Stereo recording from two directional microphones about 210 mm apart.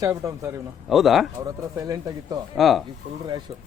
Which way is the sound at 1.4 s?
15° right (ahead or behind).